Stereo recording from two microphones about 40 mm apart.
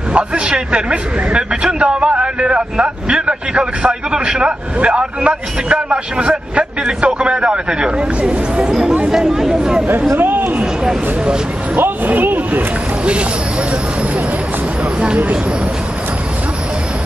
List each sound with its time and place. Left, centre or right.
0.1 s speech: right
8.6 s speech: centre
10.1 s a man's voice: right
12.1 s speech: right
15.0 s speech: right